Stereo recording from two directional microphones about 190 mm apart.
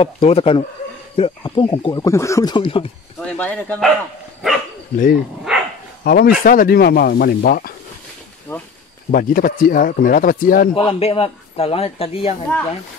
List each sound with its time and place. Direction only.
0.0 s speech: 30° left (ahead or behind)
3.2 s speech: 5° left (ahead or behind)
4.9 s speech: 45° left (ahead or behind)
8.5 s speech: 10° left (ahead or behind)
9.1 s speech: 50° left (ahead or behind)
10.7 s speech: 30° left (ahead or behind)